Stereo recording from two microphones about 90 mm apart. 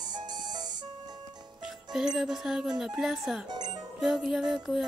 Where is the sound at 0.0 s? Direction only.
55° right (ahead or behind).